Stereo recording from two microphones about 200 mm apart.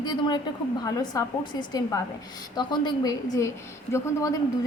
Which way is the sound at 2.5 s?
20° left (ahead or behind).